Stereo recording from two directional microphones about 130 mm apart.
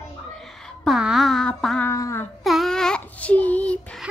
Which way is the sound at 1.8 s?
20° left (ahead or behind).